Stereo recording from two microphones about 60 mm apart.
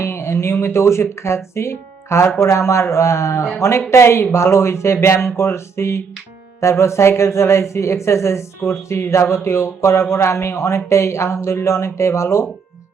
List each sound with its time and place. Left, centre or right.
0.0 s speech: left